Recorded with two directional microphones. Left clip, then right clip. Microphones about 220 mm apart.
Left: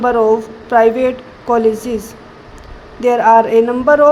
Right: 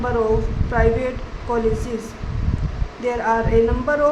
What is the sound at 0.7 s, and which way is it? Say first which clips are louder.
Speech: left 9 dB; 35° left (ahead or behind).